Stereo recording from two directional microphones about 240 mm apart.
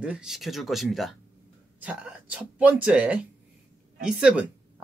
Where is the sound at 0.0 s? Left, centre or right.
Centre.